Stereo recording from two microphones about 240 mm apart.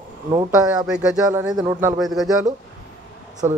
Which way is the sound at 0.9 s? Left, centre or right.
Centre.